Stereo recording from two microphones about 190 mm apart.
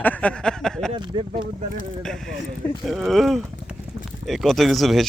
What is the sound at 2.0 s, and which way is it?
Speech, 5° left (ahead or behind).